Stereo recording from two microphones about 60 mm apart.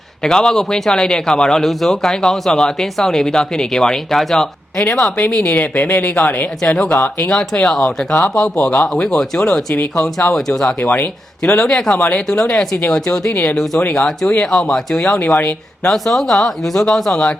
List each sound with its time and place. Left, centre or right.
0.2 s a man's voice: centre
5.3 s speech: left
6.6 s a man's voice: centre
8.5 s speech: left
9.0 s a man's voice: centre
10.8 s speech: left
11.4 s a man's voice: centre
11.9 s speech: left
12.3 s a man's voice: centre
13.3 s speech: left
14.5 s a man's voice: centre
15.4 s speech: left
15.9 s a man's voice: centre